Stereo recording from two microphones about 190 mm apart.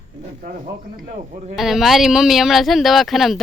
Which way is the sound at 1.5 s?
Centre (ahead or behind).